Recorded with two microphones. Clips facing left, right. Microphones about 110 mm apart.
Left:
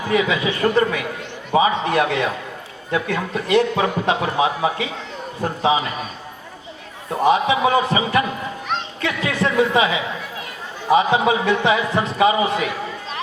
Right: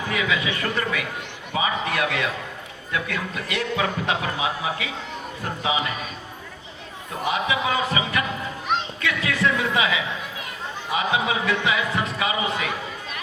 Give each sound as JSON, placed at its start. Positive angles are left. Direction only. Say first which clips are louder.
{"t": 0.1, "sound": "a man's voice", "louder": "left 7 dB", "side_deg": 30}
{"t": 7.3, "sound": "a man's voice", "louder": "left 7 dB", "side_deg": 30}